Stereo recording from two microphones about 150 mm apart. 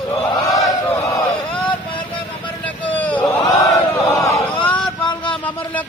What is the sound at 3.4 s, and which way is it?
Chant, 20° left (ahead or behind).